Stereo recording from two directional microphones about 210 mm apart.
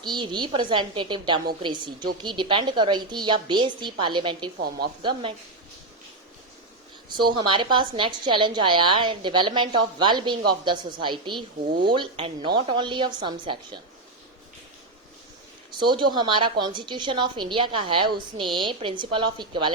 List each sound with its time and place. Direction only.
0.0 s a woman's voice: 20° right (ahead or behind)
7.2 s a woman's voice: 20° right (ahead or behind)
15.8 s a woman's voice: 20° right (ahead or behind)